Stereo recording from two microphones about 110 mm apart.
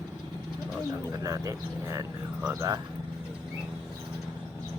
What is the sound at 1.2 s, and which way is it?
A man's voice, 30° right (ahead or behind).